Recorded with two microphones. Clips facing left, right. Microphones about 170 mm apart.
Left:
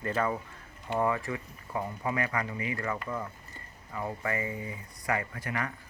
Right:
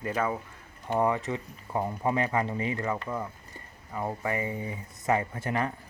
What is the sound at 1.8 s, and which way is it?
Speech, 30° right (ahead or behind).